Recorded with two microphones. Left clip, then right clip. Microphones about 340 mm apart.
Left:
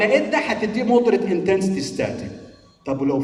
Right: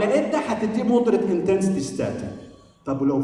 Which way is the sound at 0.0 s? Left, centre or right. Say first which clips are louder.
Left 3 dB; left.